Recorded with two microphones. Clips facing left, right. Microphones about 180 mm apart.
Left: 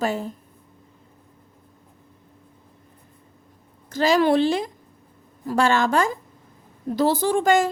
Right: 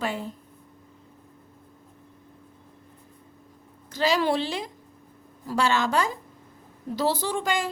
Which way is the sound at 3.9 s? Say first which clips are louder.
Left 5 dB; 50° left (ahead or behind).